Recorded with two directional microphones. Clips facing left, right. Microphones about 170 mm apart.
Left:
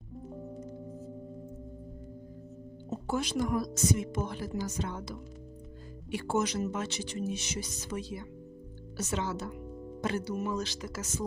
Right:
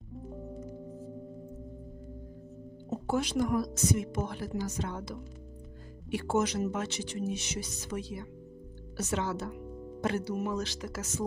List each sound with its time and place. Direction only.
3.1 s speech: 60° right (ahead or behind)